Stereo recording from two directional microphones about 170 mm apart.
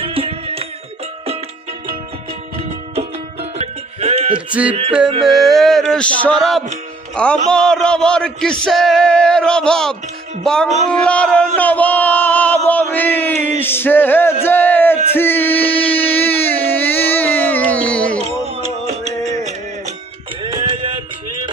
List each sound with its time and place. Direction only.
0.0 s music: 30° right (ahead or behind)
4.0 s music: 35° right (ahead or behind)
5.2 s a sound: centre (ahead or behind)
15.1 s male singing: 15° left (ahead or behind)
16.0 s a sound: 10° left (ahead or behind)
18.2 s music: 40° right (ahead or behind)
20.4 s music: 30° right (ahead or behind)